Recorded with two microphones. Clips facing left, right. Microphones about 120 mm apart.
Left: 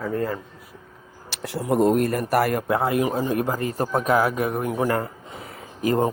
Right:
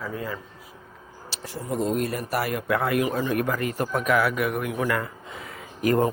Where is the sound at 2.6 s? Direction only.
30° left (ahead or behind).